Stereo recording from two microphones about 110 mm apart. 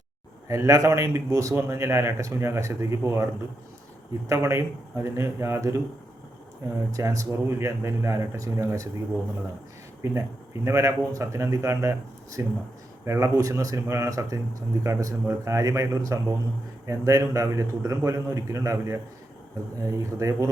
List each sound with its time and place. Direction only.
0.4 s a man's voice: 30° right (ahead or behind)
4.3 s a man's voice: 25° right (ahead or behind)
6.9 s a man's voice: 30° right (ahead or behind)
10.0 s a man's voice: 25° right (ahead or behind)